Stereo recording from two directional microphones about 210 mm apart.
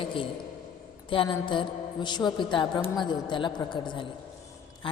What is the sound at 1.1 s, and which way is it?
A woman's voice, 25° left (ahead or behind).